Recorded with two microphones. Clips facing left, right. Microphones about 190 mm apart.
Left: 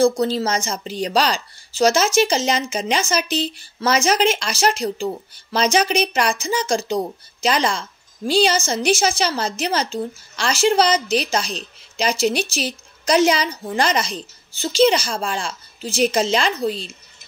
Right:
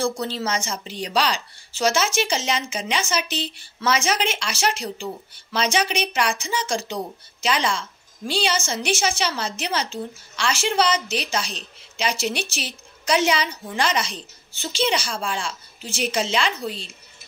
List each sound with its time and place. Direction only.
0.2 s a woman's voice: 40° left (ahead or behind)